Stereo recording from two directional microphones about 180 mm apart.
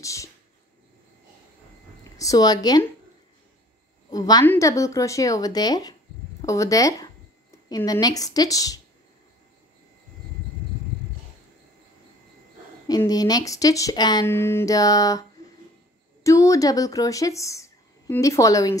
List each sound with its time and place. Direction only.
0.0 s speech: 15° left (ahead or behind)
2.1 s a woman's voice: 20° left (ahead or behind)
4.1 s a woman's voice: 20° left (ahead or behind)
12.8 s a woman's voice: 20° left (ahead or behind)
16.3 s a woman's voice: 15° left (ahead or behind)